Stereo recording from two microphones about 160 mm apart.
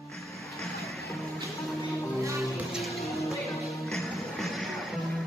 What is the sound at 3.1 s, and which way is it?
Music, 20° left (ahead or behind).